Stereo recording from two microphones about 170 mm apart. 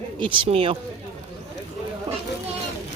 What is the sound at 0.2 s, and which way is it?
Speech, 30° right (ahead or behind).